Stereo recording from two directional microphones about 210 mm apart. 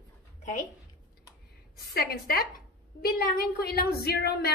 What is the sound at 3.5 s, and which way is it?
Speech, 50° left (ahead or behind).